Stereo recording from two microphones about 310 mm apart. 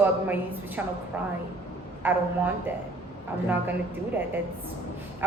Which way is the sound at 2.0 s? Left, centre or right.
Centre.